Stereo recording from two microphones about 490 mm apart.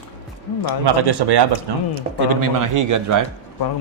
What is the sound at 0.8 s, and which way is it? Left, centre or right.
Speech, right.